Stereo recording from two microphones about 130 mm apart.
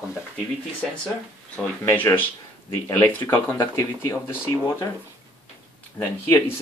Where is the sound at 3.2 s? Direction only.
30° left (ahead or behind).